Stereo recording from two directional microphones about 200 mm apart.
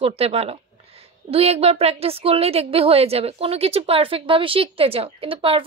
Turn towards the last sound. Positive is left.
turn(degrees=-25)  # may be behind; listen again after turning